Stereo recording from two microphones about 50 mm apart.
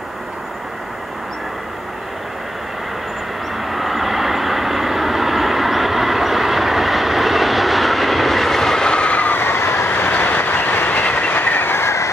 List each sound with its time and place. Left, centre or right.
3.6 s vehicle: centre; by 9.3 s left
9.3 s train: left
9.8 s train: left